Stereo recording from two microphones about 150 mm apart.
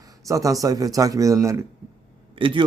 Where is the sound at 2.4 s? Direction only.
35° right (ahead or behind).